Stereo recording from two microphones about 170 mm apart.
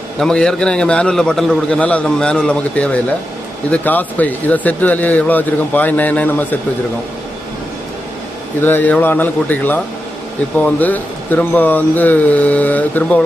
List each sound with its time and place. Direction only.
0.2 s a man's voice: 5° left (ahead or behind)
8.6 s speech: 10° left (ahead or behind)